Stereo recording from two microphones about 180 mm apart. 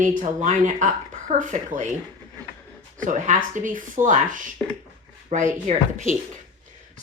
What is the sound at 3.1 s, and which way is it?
Speech, 45° right (ahead or behind).